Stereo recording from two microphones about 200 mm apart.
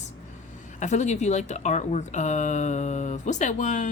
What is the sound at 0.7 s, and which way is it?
Speech, 35° left (ahead or behind).